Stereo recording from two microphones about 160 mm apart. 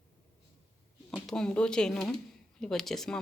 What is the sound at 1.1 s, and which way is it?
Speech, 5° left (ahead or behind).